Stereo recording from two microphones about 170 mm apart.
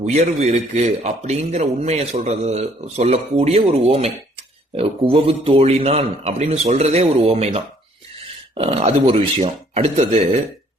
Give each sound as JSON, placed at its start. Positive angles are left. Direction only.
{"t": 0.0, "sound": "a man's voice", "side_deg": -40}